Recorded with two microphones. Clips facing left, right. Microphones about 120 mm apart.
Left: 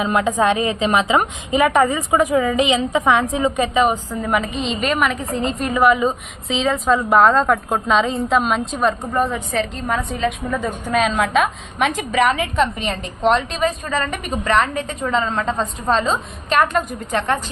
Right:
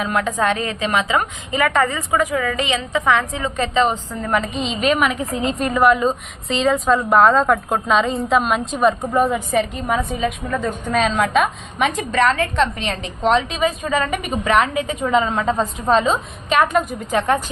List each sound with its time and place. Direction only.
0.0 s a woman's voice: 20° left (ahead or behind); by 17.4 s 5° right (ahead or behind)